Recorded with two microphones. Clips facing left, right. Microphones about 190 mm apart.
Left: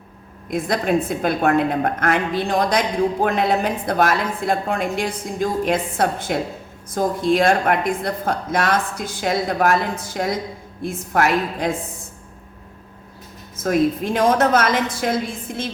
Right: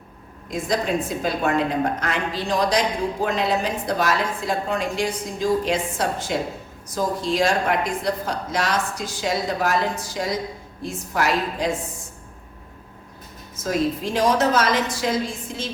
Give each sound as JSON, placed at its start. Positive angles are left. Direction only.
{"t": 1.2, "sound": "a woman's voice", "side_deg": 55}
{"t": 13.6, "sound": "a woman's voice", "side_deg": 55}
{"t": 15.5, "sound": "music", "side_deg": 55}